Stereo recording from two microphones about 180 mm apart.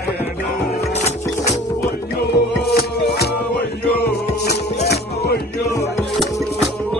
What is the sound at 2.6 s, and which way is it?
Music, 60° left (ahead or behind).